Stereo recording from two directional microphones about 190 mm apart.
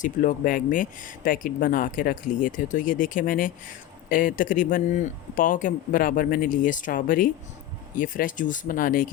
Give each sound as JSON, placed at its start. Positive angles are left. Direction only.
{"t": 0.0, "sound": "speech", "side_deg": 45}